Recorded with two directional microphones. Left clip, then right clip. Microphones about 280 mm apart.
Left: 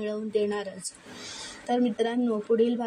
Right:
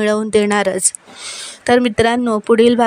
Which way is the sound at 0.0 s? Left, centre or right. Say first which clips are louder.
Right 13 dB; right.